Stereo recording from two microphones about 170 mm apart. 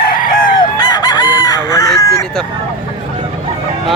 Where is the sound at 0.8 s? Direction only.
25° left (ahead or behind).